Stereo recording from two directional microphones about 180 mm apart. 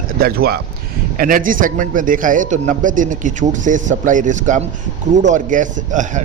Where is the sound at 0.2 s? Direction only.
60° right (ahead or behind).